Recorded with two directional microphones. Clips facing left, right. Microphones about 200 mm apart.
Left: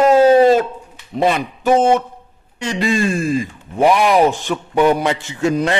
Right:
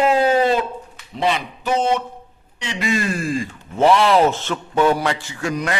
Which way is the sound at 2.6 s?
35° left (ahead or behind).